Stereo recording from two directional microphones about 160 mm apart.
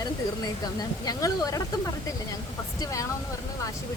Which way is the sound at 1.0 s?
25° left (ahead or behind).